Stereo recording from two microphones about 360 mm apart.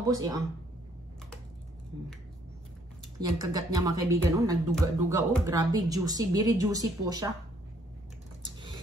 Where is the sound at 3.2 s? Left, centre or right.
Centre.